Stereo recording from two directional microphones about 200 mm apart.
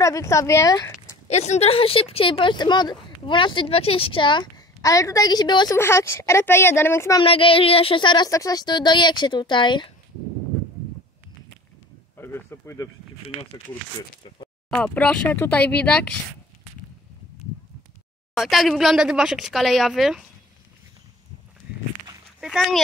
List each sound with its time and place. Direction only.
0.0 s a woman's voice: 15° left (ahead or behind)
1.2 s a woman's voice: 35° left (ahead or behind); by 7.2 s 15° left (ahead or behind)
7.2 s speech: 25° left (ahead or behind)
12.2 s a woman's voice: 10° left (ahead or behind)
14.7 s a woman's voice: 5° left (ahead or behind)
18.3 s speech: centre (ahead or behind)
22.4 s speech: centre (ahead or behind)